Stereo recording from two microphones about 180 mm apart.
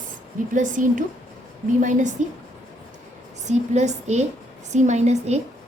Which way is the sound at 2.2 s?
40° right (ahead or behind).